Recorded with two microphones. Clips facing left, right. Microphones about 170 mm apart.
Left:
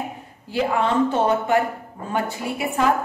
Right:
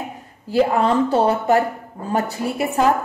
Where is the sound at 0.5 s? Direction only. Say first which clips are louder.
Right 4 dB; 40° right (ahead or behind).